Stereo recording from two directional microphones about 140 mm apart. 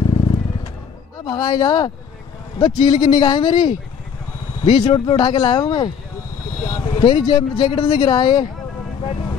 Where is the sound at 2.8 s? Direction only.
30° left (ahead or behind).